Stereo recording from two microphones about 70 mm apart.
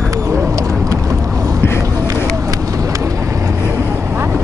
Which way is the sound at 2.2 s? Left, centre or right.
Right.